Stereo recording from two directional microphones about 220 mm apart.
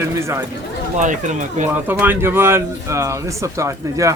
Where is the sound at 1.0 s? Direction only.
35° right (ahead or behind).